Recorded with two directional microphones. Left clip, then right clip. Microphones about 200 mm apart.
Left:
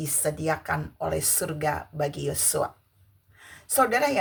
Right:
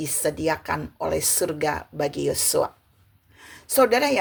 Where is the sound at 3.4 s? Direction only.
30° right (ahead or behind).